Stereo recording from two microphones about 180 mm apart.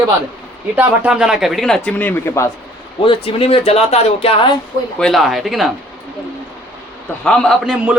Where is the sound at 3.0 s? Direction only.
30° left (ahead or behind).